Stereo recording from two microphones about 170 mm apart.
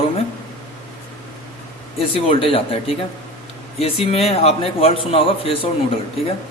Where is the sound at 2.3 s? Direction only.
35° left (ahead or behind).